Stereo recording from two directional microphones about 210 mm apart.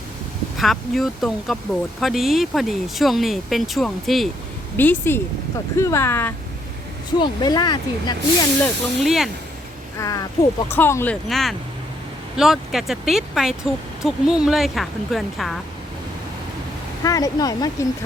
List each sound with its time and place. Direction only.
0.5 s speech: centre (ahead or behind); by 8.4 s 20° left (ahead or behind)
8.6 s speech: centre (ahead or behind)
10.0 s speech: 15° left (ahead or behind); by 15.5 s centre (ahead or behind)
17.0 s speech: 15° left (ahead or behind)